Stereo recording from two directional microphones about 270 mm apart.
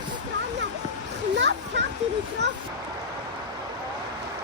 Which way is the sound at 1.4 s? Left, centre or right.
Right.